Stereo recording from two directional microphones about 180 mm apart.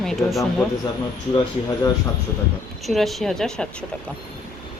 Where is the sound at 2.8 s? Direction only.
Centre (ahead or behind).